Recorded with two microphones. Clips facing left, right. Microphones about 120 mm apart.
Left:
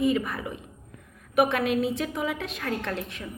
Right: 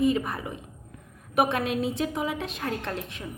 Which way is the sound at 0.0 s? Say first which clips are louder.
Even; 30° right (ahead or behind).